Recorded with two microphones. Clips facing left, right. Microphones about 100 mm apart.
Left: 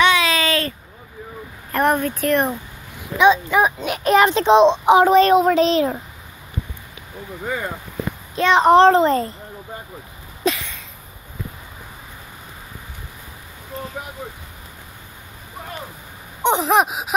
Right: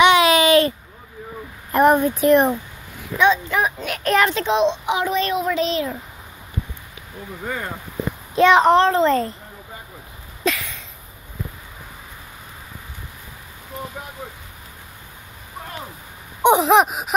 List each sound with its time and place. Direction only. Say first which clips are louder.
0.0 s a sound: right 4 dB; 25° right (ahead or behind)
1.7 s speech: right 4 dB; 15° right (ahead or behind)
3.2 s a child's voice: left 3 dB; 15° left (ahead or behind); by 5.9 s 35° left (ahead or behind)
8.4 s speech: right 3 dB; 10° right (ahead or behind)
8.7 s a child's voice: left 5 dB; 30° left (ahead or behind)
9.0 s a child's voice: even; 5° left (ahead or behind)
10.4 s a sound: left 1 dB; 5° left (ahead or behind)
16.4 s gasp: right 3 dB; centre (ahead or behind)